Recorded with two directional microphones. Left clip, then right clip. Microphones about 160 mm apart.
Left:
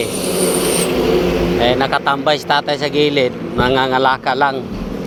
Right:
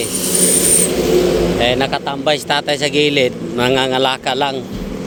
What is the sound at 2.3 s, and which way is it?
A man's voice, 25° right (ahead or behind).